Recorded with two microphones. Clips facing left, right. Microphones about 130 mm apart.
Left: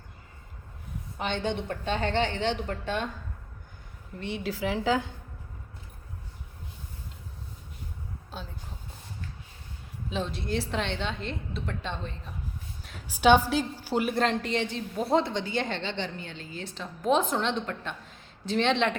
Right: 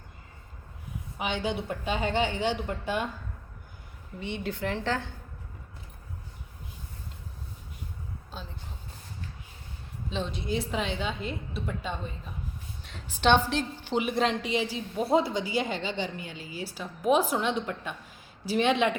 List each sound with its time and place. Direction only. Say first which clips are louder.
1.2 s a woman's voice: even; 5° right (ahead or behind)
4.2 s a woman's voice: left 1 dB; centre (ahead or behind)
8.3 s a sound: left 2 dB; 5° left (ahead or behind)
10.1 s a woman's voice: even; centre (ahead or behind)
12.8 s a woman's voice: left 3 dB; 5° left (ahead or behind); by 18.9 s 10° right (ahead or behind)